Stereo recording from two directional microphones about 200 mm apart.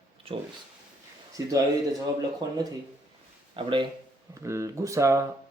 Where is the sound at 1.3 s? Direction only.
15° right (ahead or behind).